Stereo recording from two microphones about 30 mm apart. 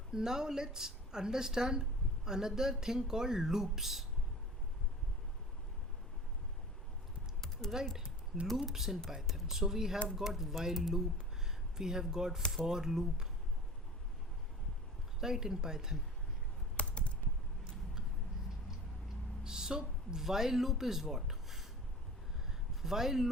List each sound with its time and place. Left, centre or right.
0.1 s speech: right
7.6 s speech: centre
8.5 s speech: centre
15.2 s speech: centre
16.7 s typing: left
19.5 s a sound: right
20.2 s speech: centre
22.8 s speech: centre